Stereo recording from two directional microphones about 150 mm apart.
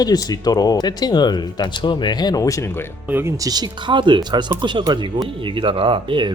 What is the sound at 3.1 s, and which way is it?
Speech, 15° right (ahead or behind).